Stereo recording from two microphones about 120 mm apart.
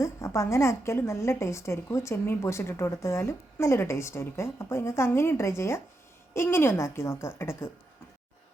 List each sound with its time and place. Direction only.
0.0 s a woman's voice: 25° left (ahead or behind)